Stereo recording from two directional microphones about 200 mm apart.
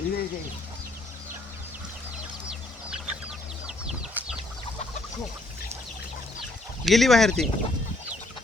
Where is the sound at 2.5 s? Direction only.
5° right (ahead or behind).